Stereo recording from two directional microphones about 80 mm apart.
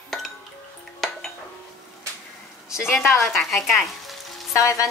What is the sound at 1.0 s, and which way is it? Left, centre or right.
Dishes, centre.